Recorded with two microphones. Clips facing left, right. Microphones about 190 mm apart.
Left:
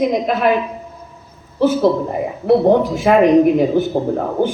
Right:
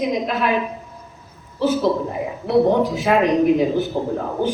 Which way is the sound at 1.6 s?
55° left (ahead or behind).